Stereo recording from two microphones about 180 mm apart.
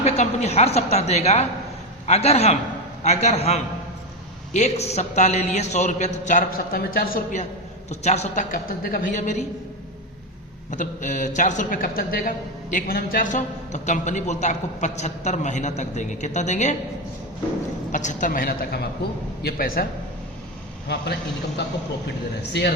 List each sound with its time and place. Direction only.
0.0 s a man's voice: 35° left (ahead or behind)
7.9 s a man's voice: 40° left (ahead or behind)
10.7 s a man's voice: 45° left (ahead or behind)
17.9 s a man's voice: 45° left (ahead or behind)
20.8 s a man's voice: 70° left (ahead or behind)